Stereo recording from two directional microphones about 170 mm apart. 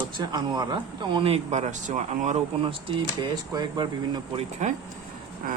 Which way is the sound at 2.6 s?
30° right (ahead or behind).